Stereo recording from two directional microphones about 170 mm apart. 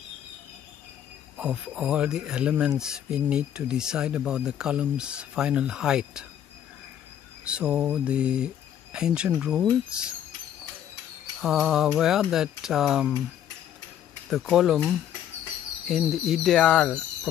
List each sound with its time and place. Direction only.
1.3 s speech: 5° right (ahead or behind)
7.4 s mantra: 5° right (ahead or behind)
8.9 s speech: 5° right (ahead or behind)
11.4 s speech: centre (ahead or behind)
14.3 s speech: centre (ahead or behind)